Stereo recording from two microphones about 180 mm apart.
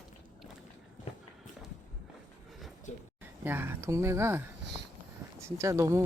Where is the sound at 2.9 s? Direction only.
40° left (ahead or behind).